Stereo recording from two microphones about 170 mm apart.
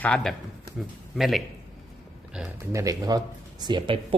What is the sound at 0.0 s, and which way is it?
Speech, 5° left (ahead or behind).